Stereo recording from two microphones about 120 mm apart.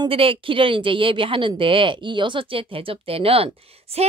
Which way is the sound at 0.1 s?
50° right (ahead or behind).